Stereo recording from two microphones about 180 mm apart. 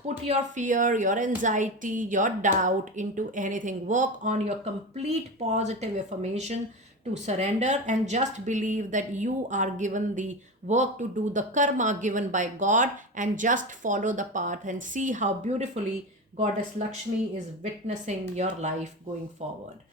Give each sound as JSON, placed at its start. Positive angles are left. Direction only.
{"t": 0.3, "sound": "a woman's voice", "side_deg": -45}
{"t": 17.6, "sound": "speech", "side_deg": -40}